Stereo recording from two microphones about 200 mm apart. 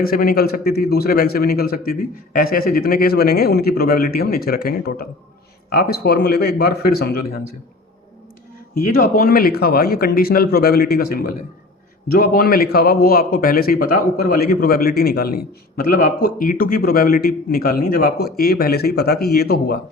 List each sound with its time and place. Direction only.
0.0 s a man's voice: 45° left (ahead or behind)
8.7 s a man's voice: 45° left (ahead or behind)